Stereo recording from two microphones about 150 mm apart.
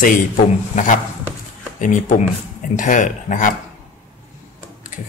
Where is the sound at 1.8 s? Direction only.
60° left (ahead or behind).